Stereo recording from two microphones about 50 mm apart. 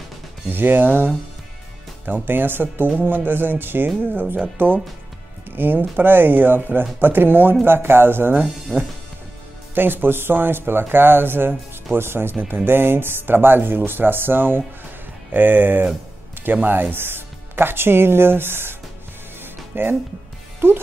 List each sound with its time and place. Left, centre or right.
0.5 s speech: right
9.8 s speech: right
19.4 s music: right
20.6 s speech: right